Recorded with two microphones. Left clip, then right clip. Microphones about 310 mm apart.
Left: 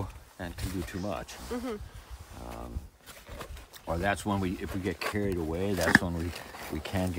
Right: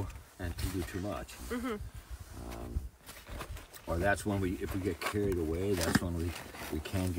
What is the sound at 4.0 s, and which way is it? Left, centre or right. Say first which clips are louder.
Speech: left 1 dB; centre.